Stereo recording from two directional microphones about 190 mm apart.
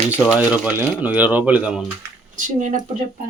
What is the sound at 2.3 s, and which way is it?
Speech, 45° right (ahead or behind).